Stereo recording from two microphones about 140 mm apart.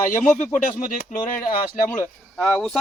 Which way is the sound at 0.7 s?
80° left.